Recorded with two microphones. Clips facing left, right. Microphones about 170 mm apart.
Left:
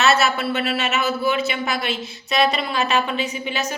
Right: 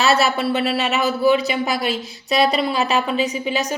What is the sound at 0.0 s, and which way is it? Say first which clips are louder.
A man's voice: right 1 dB; 35° right (ahead or behind).